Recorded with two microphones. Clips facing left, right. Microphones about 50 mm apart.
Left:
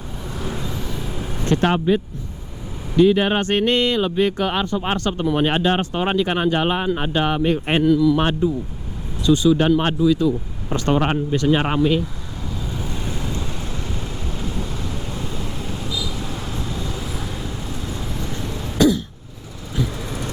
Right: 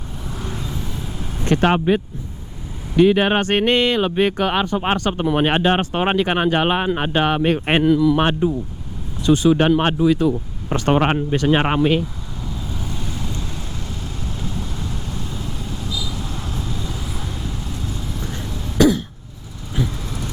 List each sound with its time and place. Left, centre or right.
0.3 s vehicle: centre
0.9 s a sound: centre
1.6 s speech: right
9.2 s speech: right
10.0 s speech: right
12.8 s vehicle: centre
14.0 s boat: centre
15.0 s vehicle: centre
16.0 s a sound: centre
17.0 s vehicle: centre
18.2 s a sound: centre
18.4 s throat clearing: centre
18.8 s cough: right
19.8 s vehicle: centre